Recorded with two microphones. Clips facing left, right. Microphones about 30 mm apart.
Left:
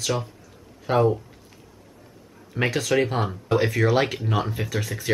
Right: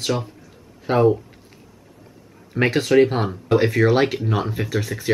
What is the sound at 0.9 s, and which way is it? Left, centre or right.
Speech, right.